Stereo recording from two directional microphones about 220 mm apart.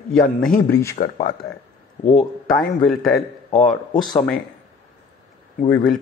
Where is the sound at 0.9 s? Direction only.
40° left (ahead or behind).